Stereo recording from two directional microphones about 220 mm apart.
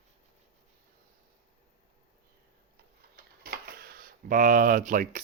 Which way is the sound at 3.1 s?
45° right (ahead or behind).